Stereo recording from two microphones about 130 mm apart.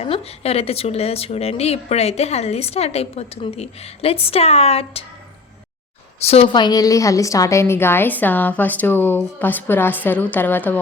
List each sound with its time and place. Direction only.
0.0 s speech: 50° left (ahead or behind)
6.2 s speech: 50° left (ahead or behind)
6.5 s a woman's voice: 35° left (ahead or behind); by 10.8 s 15° left (ahead or behind)